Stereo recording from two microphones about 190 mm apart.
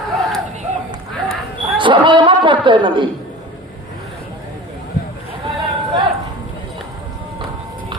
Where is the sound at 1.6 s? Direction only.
25° right (ahead or behind).